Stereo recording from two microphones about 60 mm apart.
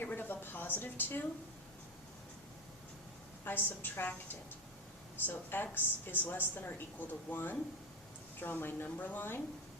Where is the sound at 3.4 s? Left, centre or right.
Left.